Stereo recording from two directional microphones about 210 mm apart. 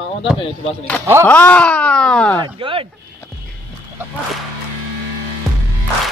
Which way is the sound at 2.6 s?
25° right (ahead or behind).